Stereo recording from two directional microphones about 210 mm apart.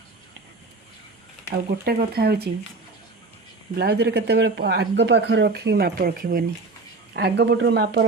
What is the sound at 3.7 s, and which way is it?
Speech, 50° right (ahead or behind).